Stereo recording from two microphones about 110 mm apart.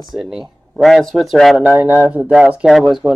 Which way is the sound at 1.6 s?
15° right (ahead or behind).